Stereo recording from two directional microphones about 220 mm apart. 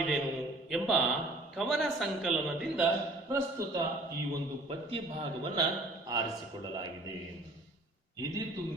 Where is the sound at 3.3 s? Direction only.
15° right (ahead or behind).